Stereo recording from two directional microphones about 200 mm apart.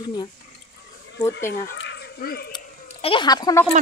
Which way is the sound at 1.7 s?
60° left (ahead or behind).